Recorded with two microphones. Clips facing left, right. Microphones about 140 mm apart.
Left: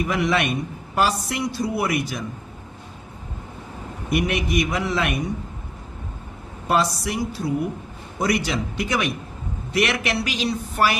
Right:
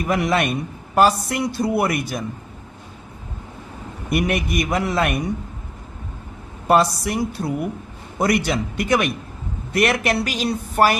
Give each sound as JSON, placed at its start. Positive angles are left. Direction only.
{"t": 0.0, "sound": "a man's voice", "side_deg": -50}
{"t": 4.1, "sound": "a man's voice", "side_deg": -50}
{"t": 6.7, "sound": "a man's voice", "side_deg": -50}